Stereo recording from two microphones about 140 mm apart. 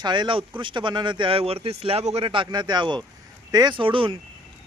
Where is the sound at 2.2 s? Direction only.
35° right (ahead or behind).